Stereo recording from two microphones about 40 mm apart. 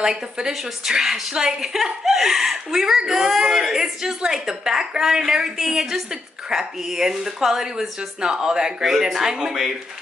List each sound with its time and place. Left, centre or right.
0.0 s speech: centre